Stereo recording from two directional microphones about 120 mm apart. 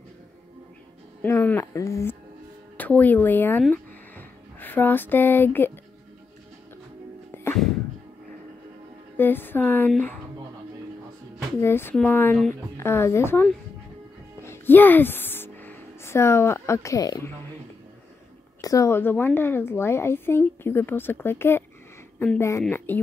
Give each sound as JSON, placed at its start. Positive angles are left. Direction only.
{"t": 1.2, "sound": "a woman's voice", "side_deg": 15}
{"t": 2.8, "sound": "a woman's voice", "side_deg": 15}
{"t": 3.7, "sound": "a sound", "side_deg": 15}
{"t": 9.1, "sound": "a woman's voice", "side_deg": 15}
{"t": 11.6, "sound": "a woman's voice", "side_deg": 20}
{"t": 14.4, "sound": "music", "side_deg": 20}
{"t": 18.6, "sound": "a woman's voice", "side_deg": 30}